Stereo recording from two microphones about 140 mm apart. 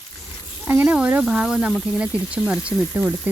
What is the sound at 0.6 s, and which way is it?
Speech, 15° right (ahead or behind).